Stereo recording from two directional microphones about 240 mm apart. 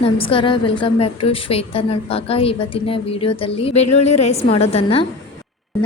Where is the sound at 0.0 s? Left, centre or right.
Left.